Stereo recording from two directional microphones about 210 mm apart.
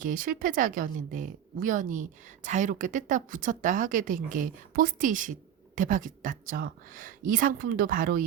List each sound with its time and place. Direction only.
0.0 s a woman's voice: 40° right (ahead or behind)